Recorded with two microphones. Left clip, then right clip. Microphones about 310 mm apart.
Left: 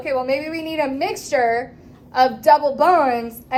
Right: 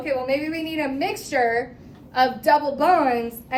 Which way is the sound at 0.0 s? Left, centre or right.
Centre.